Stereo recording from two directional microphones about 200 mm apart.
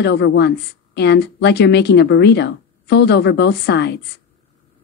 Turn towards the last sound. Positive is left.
turn(degrees=55)  # may be behind; listen again after turning